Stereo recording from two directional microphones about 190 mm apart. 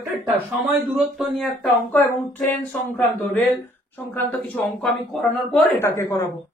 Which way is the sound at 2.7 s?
10° left (ahead or behind).